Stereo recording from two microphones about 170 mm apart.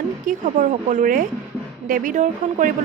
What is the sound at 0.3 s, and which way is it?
A woman's voice, 50° right (ahead or behind).